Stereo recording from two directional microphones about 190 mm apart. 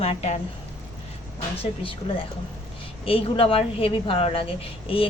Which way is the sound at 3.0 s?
30° left (ahead or behind).